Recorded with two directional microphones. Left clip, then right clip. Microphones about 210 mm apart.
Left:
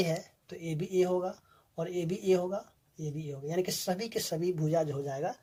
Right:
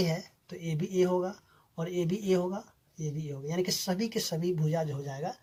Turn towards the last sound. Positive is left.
turn(degrees=35)  # may be behind; listen again after turning